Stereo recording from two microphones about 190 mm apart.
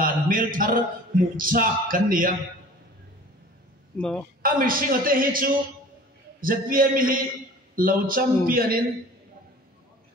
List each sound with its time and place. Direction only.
0.0 s a man's voice: 45° right (ahead or behind)
3.9 s speech: 5° left (ahead or behind)
4.4 s a man's voice: 50° right (ahead or behind)